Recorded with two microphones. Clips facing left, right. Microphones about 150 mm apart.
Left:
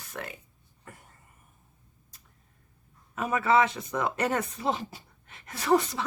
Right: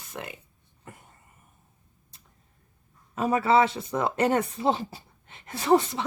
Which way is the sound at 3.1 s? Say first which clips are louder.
Right 3 dB; 30° right (ahead or behind).